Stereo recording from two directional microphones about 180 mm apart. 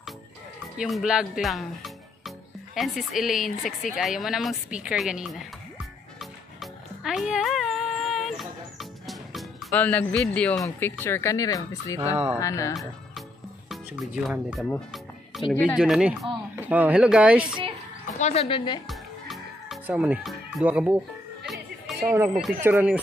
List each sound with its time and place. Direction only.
0.7 s a woman's voice: centre (ahead or behind)
6.1 s music: centre (ahead or behind)
9.7 s speech: 10° left (ahead or behind)
13.7 s speech: centre (ahead or behind)
14.7 s music: centre (ahead or behind)
15.5 s speech: 10° left (ahead or behind)
15.8 s speech: 5° right (ahead or behind)
18.2 s a woman's voice: 35° left (ahead or behind)
18.9 s music: centre (ahead or behind)
22.6 s speech: 10° right (ahead or behind)